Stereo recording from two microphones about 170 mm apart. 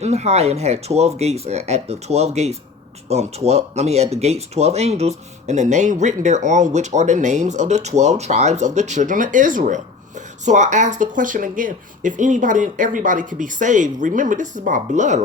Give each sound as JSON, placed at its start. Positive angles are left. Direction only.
{"t": 0.0, "sound": "speech", "side_deg": -40}